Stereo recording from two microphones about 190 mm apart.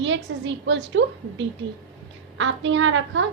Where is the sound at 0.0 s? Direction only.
75° right (ahead or behind).